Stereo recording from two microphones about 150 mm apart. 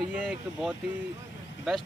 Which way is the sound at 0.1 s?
10° right (ahead or behind).